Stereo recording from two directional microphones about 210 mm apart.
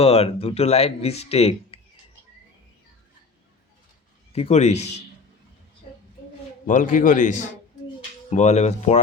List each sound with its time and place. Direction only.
0.0 s speech: 30° left (ahead or behind)
4.3 s a man's voice: 30° left (ahead or behind)
6.7 s a man's voice: 40° left (ahead or behind)